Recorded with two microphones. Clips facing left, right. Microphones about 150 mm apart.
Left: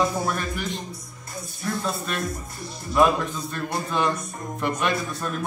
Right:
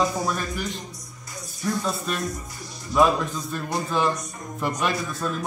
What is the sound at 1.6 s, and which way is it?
A man's voice, centre (ahead or behind).